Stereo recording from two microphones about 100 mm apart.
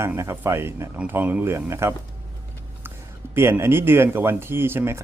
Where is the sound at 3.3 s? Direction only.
25° right (ahead or behind).